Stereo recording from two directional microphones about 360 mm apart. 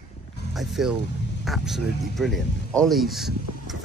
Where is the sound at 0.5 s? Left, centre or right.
Centre.